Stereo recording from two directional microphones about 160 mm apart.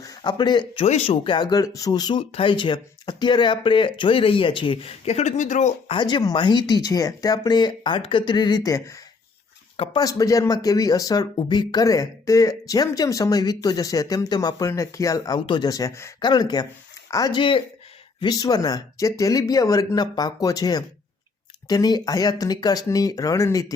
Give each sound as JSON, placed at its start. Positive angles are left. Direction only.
{"t": 0.0, "sound": "speech", "side_deg": 25}
{"t": 0.9, "sound": "speech", "side_deg": 40}
{"t": 6.0, "sound": "speech", "side_deg": 30}
{"t": 9.7, "sound": "speech", "side_deg": 35}
{"t": 10.0, "sound": "speech", "side_deg": 20}